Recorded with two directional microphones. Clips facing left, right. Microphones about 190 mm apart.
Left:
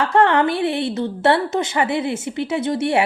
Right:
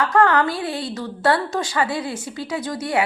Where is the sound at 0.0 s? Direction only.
25° left (ahead or behind).